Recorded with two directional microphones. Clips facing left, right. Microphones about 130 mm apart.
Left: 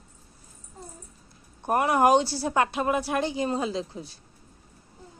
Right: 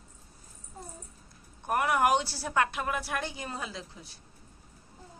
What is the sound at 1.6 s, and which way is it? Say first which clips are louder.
A woman's voice: left 5 dB; 25° left (ahead or behind).